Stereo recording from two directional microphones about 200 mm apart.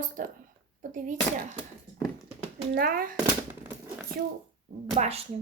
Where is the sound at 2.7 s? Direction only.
45° right (ahead or behind).